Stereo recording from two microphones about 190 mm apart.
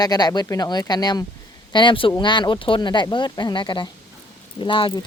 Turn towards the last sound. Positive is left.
turn(degrees=25)  # may be behind; listen again after turning